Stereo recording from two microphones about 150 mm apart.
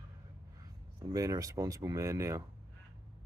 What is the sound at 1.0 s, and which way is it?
Speech, 20° right (ahead or behind).